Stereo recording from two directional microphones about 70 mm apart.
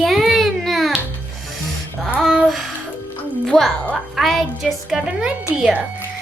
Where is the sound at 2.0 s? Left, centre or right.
Centre.